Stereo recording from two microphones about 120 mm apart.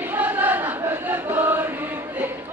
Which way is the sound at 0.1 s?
15° right (ahead or behind).